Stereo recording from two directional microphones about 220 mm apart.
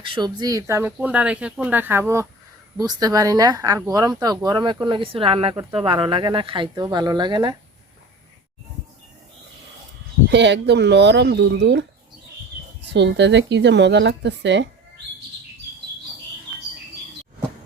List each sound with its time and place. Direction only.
0.0 s speech: 20° right (ahead or behind)
10.3 s speech: 55° right (ahead or behind)